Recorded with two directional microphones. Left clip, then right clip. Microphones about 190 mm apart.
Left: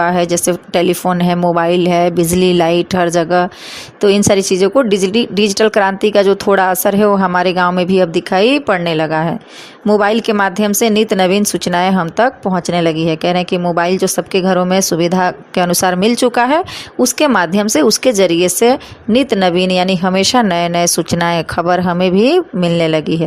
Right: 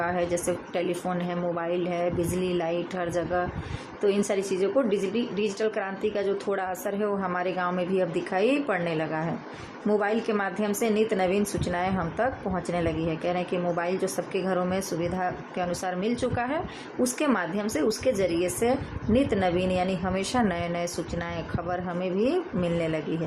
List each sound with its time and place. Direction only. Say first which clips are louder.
0.0 s speech: left 13 dB; 45° left (ahead or behind)